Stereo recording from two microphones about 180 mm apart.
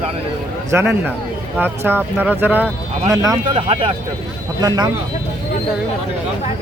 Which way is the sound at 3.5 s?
30° right (ahead or behind).